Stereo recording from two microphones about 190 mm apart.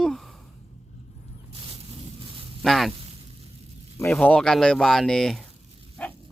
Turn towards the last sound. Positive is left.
turn(degrees=5)  # may be behind; listen again after turning